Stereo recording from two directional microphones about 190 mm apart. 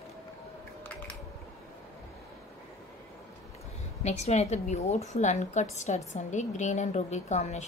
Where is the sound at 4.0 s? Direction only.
35° left (ahead or behind).